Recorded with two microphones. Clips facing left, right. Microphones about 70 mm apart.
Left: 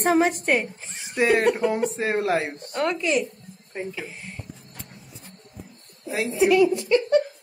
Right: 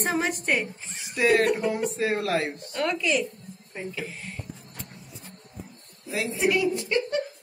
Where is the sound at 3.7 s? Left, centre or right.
Centre.